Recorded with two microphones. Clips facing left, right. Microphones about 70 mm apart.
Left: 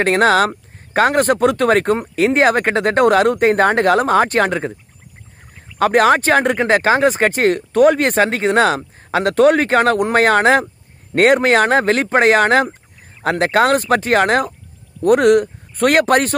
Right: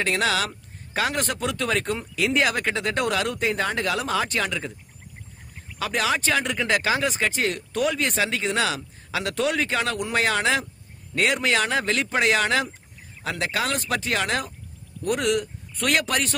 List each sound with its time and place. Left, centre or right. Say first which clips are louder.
0.0 s speech: left 11 dB; left
5.8 s speech: left 12 dB; left